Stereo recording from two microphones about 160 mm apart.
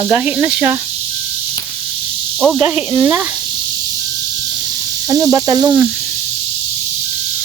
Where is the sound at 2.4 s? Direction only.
Centre (ahead or behind).